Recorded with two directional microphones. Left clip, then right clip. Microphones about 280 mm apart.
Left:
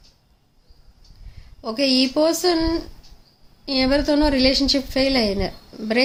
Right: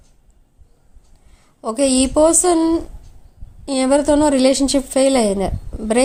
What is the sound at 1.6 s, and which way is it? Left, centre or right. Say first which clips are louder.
A woman's voice: right 3 dB; centre.